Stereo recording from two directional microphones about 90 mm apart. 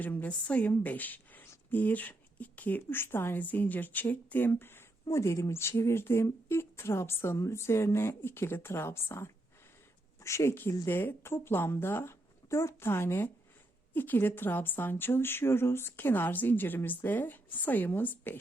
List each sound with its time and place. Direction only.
0.0 s a woman's voice: 20° left (ahead or behind)